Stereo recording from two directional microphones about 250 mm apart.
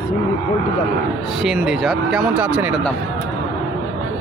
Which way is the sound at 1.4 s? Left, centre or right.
Centre.